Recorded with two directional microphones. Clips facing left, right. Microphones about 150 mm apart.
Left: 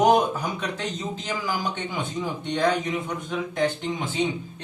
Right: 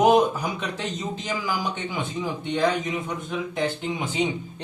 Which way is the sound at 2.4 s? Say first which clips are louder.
Even; 5° right (ahead or behind).